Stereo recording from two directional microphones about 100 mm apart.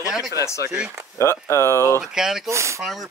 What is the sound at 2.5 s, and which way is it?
Speech, 30° right (ahead or behind).